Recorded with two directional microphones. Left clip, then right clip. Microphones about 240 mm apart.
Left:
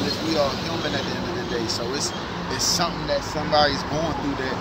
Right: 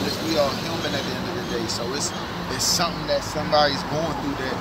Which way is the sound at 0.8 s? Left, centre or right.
Right.